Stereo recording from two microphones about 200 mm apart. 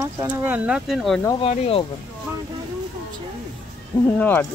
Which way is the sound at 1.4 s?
30° left (ahead or behind).